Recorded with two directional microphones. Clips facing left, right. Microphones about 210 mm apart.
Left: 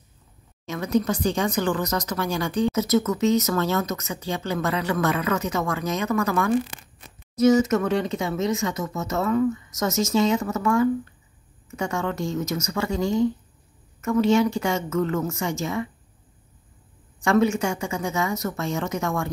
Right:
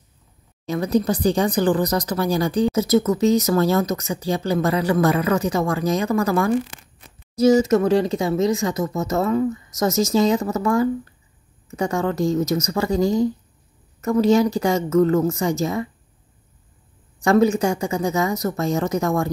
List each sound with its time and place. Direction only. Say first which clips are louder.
0.7 s speech: right 3 dB; 35° right (ahead or behind)
17.2 s speech: right 4 dB; 40° right (ahead or behind)